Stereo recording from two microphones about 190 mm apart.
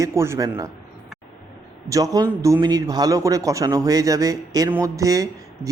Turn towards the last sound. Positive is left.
turn(degrees=-20)  # may be behind; listen again after turning